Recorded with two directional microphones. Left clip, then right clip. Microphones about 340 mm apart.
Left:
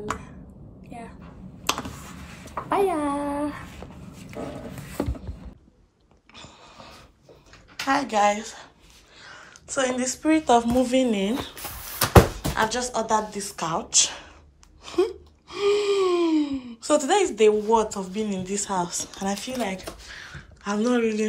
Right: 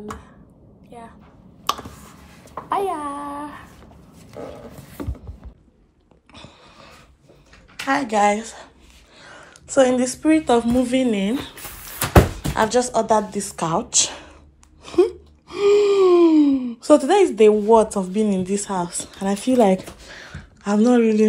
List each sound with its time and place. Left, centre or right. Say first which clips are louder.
2.9 s a sound: left 1 dB; centre
6.3 s a sound: right 1 dB; centre
7.8 s a woman's voice: right 3 dB; centre
14.8 s gasp: right 6 dB; centre
17.0 s speech: right 5 dB; left
17.4 s a woman's voice: right 6 dB; centre